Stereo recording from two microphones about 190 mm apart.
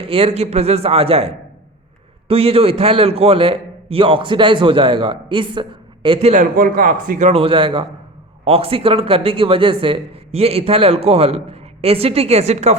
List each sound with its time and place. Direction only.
0.0 s a man's voice: 30° right (ahead or behind)
6.3 s a man's voice: 45° right (ahead or behind)